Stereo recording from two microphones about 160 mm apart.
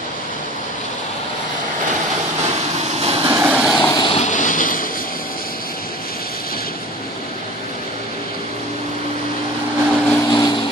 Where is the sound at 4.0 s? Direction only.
35° left (ahead or behind).